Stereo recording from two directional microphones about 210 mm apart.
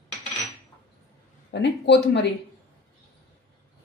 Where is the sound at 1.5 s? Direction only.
55° left (ahead or behind).